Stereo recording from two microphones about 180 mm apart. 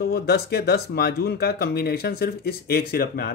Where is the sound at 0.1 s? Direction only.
60° left (ahead or behind).